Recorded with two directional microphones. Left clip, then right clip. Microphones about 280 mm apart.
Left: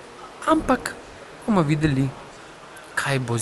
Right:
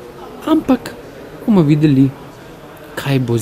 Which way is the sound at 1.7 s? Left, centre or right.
Centre.